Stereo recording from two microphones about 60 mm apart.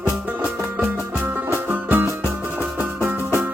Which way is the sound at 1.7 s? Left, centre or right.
Right.